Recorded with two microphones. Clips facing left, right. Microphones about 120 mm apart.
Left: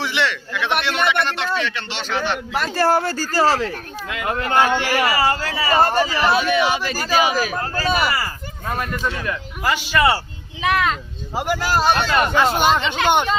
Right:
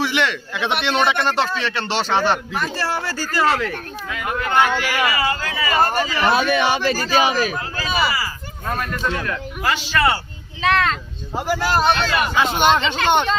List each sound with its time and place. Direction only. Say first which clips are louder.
0.0 s a man's voice: right 2 dB; 15° right (ahead or behind)
0.9 s speech: right 2 dB; 30° right (ahead or behind)
2.7 s a man's voice: left 6 dB; 50° left (ahead or behind); by 6.1 s 25° left (ahead or behind)
6.3 s speech: even; 45° right (ahead or behind)
7.3 s a man's voice: right 1 dB; 10° left (ahead or behind)
7.6 s speech: left 2 dB; 50° left (ahead or behind)
8.7 s a man's voice: right 1 dB; 10° left (ahead or behind)